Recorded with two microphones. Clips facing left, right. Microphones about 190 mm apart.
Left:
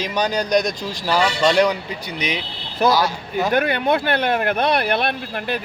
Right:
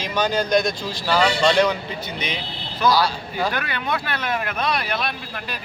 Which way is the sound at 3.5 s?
50° left (ahead or behind).